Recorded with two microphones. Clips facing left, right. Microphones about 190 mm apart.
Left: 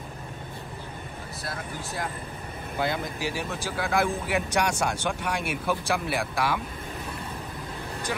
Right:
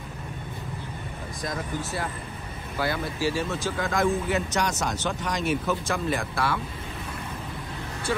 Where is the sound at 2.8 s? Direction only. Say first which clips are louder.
Right 2 dB; 20° left (ahead or behind).